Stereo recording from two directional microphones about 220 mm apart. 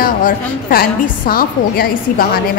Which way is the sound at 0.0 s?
40° left (ahead or behind).